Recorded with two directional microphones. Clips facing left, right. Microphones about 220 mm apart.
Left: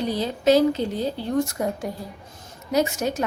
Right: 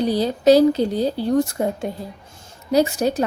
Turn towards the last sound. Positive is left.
turn(degrees=-35)  # may be behind; listen again after turning